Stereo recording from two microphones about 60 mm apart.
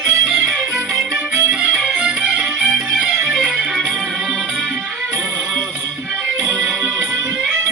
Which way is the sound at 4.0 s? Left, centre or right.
Centre.